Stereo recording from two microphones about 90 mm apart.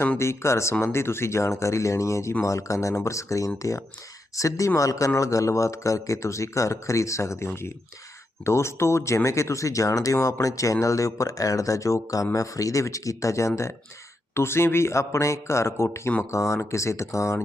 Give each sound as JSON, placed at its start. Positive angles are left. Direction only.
{"t": 0.2, "sound": "speech", "side_deg": 30}